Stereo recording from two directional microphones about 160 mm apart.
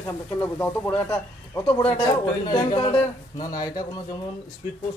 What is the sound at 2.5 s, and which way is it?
Speech, 35° left (ahead or behind).